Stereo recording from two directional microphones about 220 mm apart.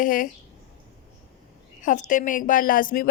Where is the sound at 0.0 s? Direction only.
35° left (ahead or behind).